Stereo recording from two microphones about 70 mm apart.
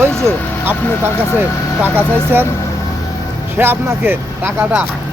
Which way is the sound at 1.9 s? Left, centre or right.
Right.